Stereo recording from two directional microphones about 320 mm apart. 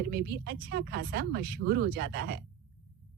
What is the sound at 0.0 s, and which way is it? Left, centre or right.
A woman's voice, right.